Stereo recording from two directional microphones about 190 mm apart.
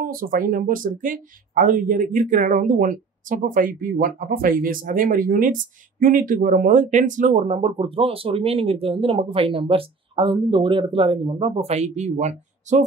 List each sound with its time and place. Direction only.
0.0 s speech: 50° right (ahead or behind)